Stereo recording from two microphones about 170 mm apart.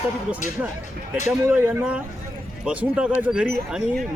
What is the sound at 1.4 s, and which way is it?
Speech, 10° right (ahead or behind).